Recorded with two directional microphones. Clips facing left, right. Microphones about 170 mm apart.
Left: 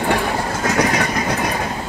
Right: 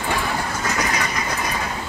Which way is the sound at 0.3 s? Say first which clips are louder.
Left 4 dB; 40° left (ahead or behind).